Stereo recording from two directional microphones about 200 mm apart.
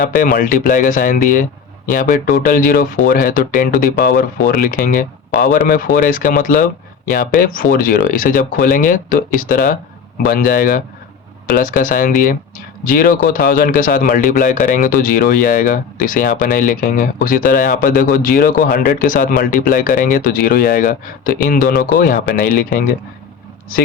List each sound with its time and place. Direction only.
0.2 s speech: 45° left (ahead or behind)